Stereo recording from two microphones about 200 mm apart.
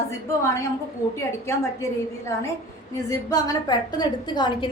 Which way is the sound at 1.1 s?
15° left (ahead or behind).